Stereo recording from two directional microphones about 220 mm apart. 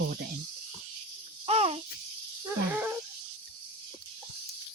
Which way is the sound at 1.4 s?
25° right (ahead or behind).